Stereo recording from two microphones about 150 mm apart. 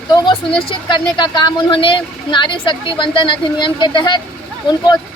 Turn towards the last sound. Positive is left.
turn(degrees=30)  # may be behind; listen again after turning